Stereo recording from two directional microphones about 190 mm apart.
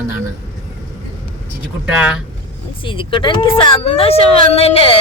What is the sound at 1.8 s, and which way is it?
Speech, 5° right (ahead or behind).